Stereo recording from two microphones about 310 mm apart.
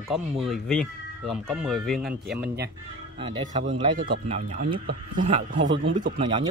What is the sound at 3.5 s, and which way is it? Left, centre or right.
A man's voice, right.